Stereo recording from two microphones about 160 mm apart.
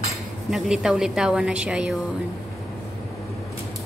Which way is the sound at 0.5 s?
5° right (ahead or behind).